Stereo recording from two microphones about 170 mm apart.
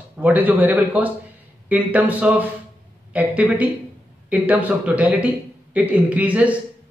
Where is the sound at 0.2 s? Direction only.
10° right (ahead or behind).